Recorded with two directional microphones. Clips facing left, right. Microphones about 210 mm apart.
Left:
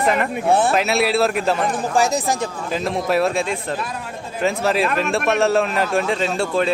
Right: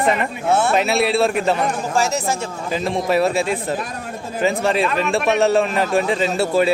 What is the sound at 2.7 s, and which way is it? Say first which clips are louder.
A man's voice: right 1 dB; centre (ahead or behind).